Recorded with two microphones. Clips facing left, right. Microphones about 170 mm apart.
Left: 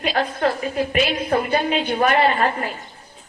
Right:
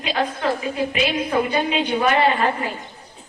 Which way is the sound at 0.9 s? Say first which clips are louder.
Left 1 dB; 50° left (ahead or behind).